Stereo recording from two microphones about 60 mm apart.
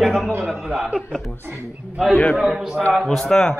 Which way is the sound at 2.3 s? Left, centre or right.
Centre.